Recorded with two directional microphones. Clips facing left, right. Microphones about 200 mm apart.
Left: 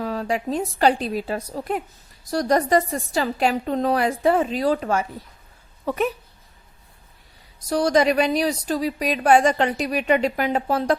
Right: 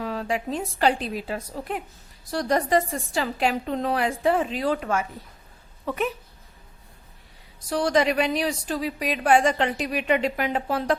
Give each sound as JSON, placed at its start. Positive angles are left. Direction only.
{"t": 0.0, "sound": "a woman's voice", "side_deg": 40}
{"t": 7.7, "sound": "a woman's voice", "side_deg": 40}